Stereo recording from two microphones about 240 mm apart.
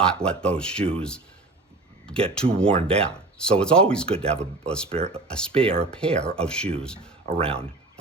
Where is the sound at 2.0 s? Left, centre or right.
Centre.